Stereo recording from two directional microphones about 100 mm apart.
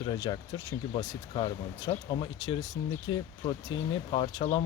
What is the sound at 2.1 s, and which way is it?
Speech, 50° left (ahead or behind).